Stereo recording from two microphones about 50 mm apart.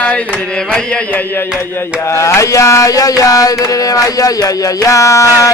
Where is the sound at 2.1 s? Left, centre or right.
Left.